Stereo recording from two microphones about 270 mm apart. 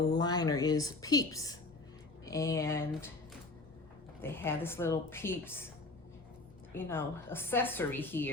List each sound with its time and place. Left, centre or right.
0.1 s a woman's voice: centre
4.2 s a woman's voice: centre
6.7 s a woman's voice: centre